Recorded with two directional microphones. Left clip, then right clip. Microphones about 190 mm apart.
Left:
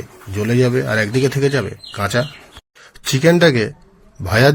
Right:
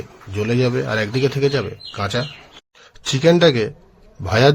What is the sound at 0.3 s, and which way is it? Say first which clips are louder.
A man's voice: left 3 dB; 10° left (ahead or behind).